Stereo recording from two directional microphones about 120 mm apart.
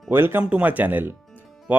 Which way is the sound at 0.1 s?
20° right (ahead or behind).